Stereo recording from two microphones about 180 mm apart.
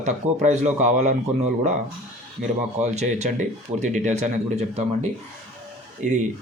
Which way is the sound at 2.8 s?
40° right (ahead or behind).